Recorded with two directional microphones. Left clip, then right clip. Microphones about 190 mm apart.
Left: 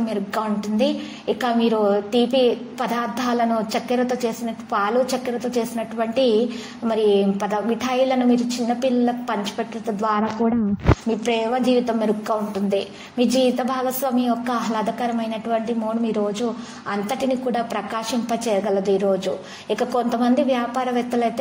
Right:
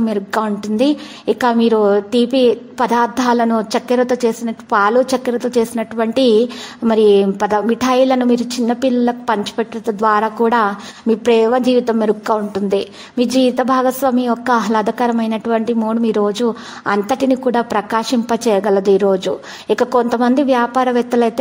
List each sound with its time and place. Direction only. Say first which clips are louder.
0.0 s a woman's voice: right 6 dB; 40° right (ahead or behind)